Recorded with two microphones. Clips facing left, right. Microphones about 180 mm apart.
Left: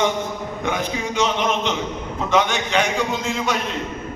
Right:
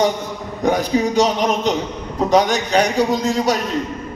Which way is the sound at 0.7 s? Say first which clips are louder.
Right 8 dB; 35° right (ahead or behind).